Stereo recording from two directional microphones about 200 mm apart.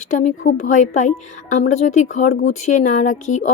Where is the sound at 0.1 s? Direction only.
35° left (ahead or behind).